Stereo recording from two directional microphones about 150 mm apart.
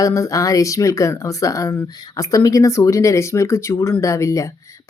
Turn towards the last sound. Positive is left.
turn(degrees=20)  # may be behind; listen again after turning